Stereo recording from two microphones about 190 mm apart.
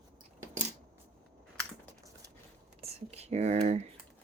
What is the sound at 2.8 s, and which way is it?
Whispering, 35° right (ahead or behind).